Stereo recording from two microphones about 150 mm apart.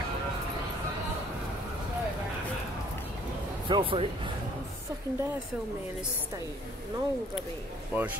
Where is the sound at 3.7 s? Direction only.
35° right (ahead or behind).